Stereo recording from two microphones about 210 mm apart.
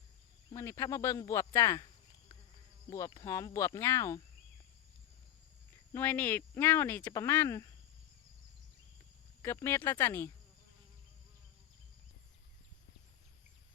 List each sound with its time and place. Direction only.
0.5 s speech: 15° left (ahead or behind)
2.9 s speech: 15° left (ahead or behind)
5.9 s speech: 10° left (ahead or behind)
9.4 s speech: 10° left (ahead or behind)